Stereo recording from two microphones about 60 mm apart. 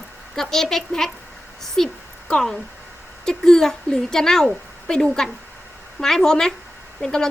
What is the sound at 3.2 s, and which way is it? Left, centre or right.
A woman's voice, centre.